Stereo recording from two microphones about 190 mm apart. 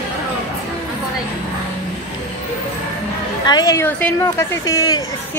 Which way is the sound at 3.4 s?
20° left (ahead or behind).